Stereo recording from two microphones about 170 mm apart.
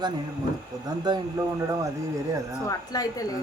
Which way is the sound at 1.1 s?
25° right (ahead or behind).